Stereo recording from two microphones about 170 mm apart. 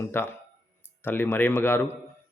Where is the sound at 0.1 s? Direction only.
10° left (ahead or behind).